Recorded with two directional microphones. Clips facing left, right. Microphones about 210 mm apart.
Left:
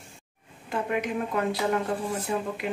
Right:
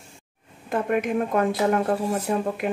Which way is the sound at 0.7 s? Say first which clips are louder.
Right 5 dB; 50° right (ahead or behind).